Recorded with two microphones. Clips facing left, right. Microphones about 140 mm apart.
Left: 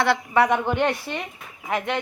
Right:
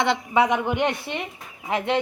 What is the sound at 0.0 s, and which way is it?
A woman's voice, 20° right (ahead or behind).